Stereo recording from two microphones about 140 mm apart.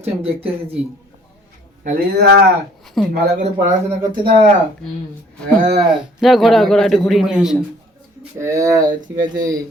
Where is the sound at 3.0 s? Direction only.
Centre (ahead or behind).